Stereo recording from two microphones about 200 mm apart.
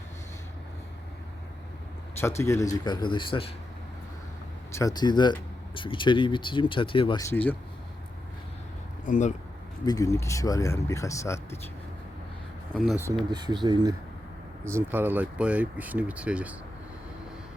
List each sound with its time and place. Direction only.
2.4 s speech: 15° left (ahead or behind)
4.7 s speech: 15° left (ahead or behind)
7.3 s speech: 10° left (ahead or behind)
9.0 s speech: 40° left (ahead or behind)
9.8 s speech: 15° left (ahead or behind)
12.7 s speech: centre (ahead or behind)
13.1 s speech: 20° right (ahead or behind)
14.6 s speech: 10° right (ahead or behind)